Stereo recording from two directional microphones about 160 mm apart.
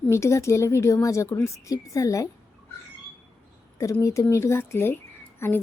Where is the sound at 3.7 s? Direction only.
20° left (ahead or behind).